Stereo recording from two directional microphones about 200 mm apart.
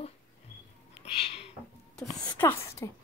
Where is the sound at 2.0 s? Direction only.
20° left (ahead or behind).